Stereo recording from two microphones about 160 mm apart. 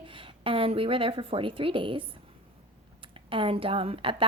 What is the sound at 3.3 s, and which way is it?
Speech, 35° right (ahead or behind).